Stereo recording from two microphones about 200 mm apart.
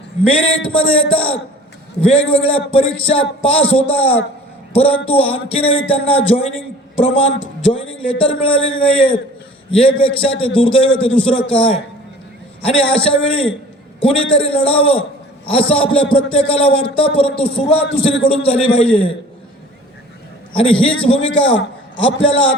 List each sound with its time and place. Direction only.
0.6 s a man's voice: 25° left (ahead or behind)
20.5 s a man's voice: 30° left (ahead or behind)